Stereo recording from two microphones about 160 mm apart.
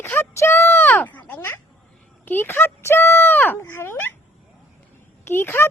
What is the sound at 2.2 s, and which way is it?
A child's voice, 15° left (ahead or behind).